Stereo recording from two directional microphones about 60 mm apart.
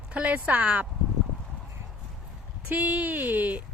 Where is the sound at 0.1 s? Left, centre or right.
Right.